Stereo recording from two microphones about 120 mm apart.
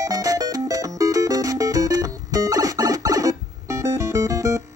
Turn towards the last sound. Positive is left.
turn(degrees=-25)  # may be behind; listen again after turning